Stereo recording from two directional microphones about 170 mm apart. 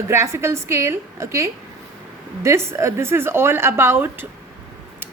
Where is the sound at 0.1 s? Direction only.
15° right (ahead or behind).